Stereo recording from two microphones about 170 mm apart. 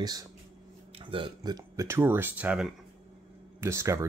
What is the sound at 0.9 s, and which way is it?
Speech, 30° right (ahead or behind).